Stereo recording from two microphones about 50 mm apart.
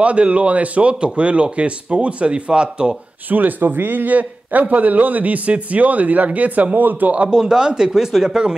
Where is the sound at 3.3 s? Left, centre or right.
Right.